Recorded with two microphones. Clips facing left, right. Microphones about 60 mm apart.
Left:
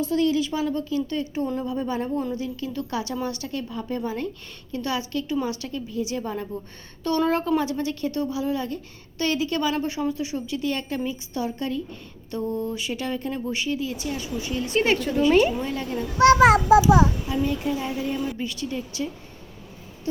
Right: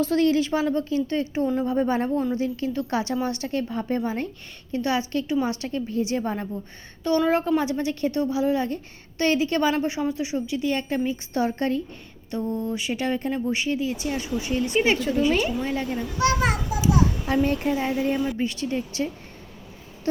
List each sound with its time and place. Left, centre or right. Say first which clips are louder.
0.0 s a woman's voice: right 2 dB; right
7.3 s a woman's voice: right 1 dB; right
11.3 s a woman's voice: right 4 dB; right
12.3 s a woman's voice: even; right
14.8 s speech: left 1 dB; centre
15.6 s a woman's voice: right 1 dB; right
16.1 s a child's voice: left 9 dB; left
17.2 s a woman's voice: right 3 dB; right
17.7 s a woman's voice: right 3 dB; right